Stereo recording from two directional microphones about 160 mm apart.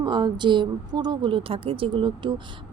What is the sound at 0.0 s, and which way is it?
Speech, 30° right (ahead or behind).